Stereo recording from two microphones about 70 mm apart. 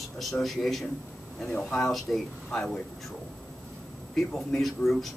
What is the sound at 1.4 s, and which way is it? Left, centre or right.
Speech, centre.